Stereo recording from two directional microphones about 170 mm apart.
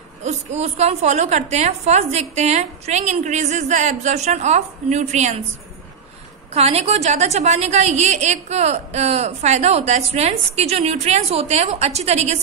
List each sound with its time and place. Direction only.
0.2 s a woman's voice: 40° right (ahead or behind)
6.5 s a woman's voice: 40° right (ahead or behind)